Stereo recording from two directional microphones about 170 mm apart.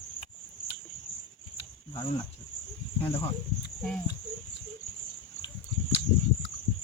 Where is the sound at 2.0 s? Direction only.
30° left (ahead or behind).